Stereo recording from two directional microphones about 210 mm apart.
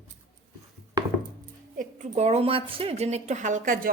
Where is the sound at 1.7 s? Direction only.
35° right (ahead or behind).